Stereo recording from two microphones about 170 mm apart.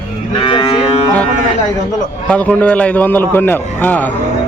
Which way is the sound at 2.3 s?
10° left (ahead or behind).